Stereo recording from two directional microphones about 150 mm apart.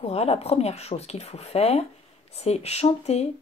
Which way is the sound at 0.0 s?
45° left (ahead or behind).